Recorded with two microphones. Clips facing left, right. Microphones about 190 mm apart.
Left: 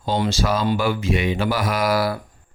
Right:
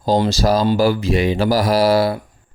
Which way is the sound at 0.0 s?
40° right (ahead or behind).